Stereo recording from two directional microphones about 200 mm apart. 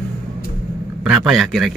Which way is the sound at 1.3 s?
Centre (ahead or behind).